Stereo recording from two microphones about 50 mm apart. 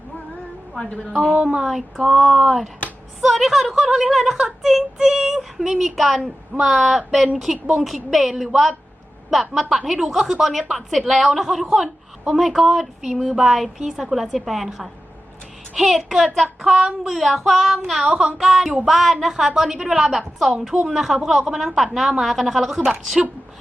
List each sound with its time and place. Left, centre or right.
0.8 s a woman's voice: centre
1.1 s a woman's voice: centre
18.3 s a woman's voice: centre